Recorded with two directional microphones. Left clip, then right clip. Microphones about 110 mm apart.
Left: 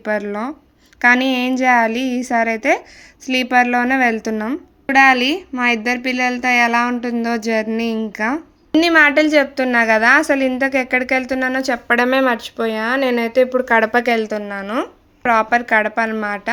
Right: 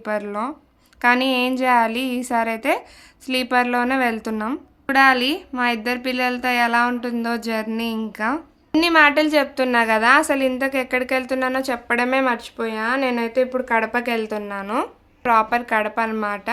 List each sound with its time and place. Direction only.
0.0 s a woman's voice: 30° left (ahead or behind); by 14.3 s 50° left (ahead or behind)
14.3 s a woman's voice: 25° left (ahead or behind)